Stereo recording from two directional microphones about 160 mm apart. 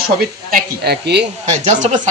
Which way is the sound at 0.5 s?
85° right.